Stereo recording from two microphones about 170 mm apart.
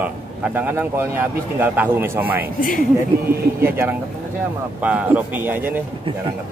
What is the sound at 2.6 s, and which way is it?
Speech, 55° left (ahead or behind).